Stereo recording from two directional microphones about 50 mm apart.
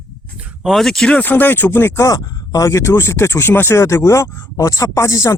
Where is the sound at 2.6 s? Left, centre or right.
Left.